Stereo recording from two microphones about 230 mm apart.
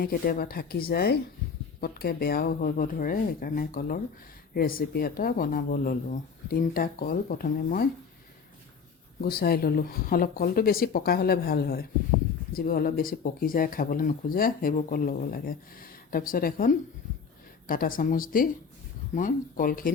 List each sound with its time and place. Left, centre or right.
0.0 s speech: left
9.2 s speech: left